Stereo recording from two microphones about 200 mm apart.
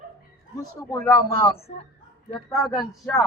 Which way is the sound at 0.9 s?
15° left (ahead or behind).